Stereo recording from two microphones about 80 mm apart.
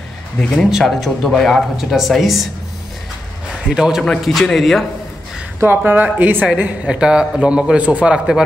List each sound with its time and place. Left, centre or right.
0.4 s speech: centre
0.7 s speech: centre
3.6 s speech: centre
5.6 s speech: right
6.1 s a man's voice: right